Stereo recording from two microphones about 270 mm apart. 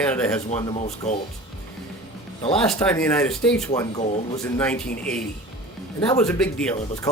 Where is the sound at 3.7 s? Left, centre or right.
Left.